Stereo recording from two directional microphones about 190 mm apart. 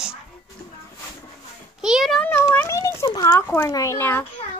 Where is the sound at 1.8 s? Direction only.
Centre (ahead or behind).